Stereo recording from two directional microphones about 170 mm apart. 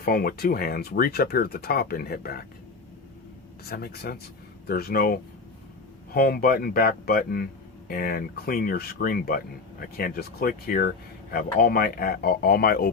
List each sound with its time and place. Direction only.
0.0 s speech: 60° left (ahead or behind)
3.6 s speech: 65° left (ahead or behind)